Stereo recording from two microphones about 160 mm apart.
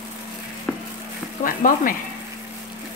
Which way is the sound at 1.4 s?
60° left (ahead or behind).